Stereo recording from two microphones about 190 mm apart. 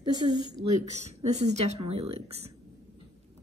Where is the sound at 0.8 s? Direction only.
35° right (ahead or behind).